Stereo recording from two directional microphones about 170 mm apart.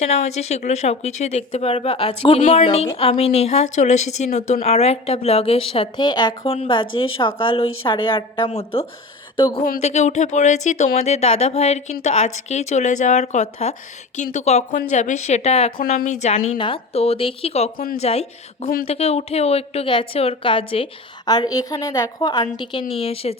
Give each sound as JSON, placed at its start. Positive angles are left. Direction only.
{"t": 0.0, "sound": "speech", "side_deg": 40}
{"t": 9.5, "sound": "speech", "side_deg": 60}
{"t": 9.8, "sound": "a woman's voice", "side_deg": 40}